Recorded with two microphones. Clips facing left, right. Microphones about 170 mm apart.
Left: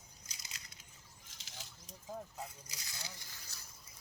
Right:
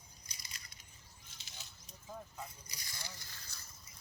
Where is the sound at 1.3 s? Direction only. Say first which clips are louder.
Left 3 dB; 90° left.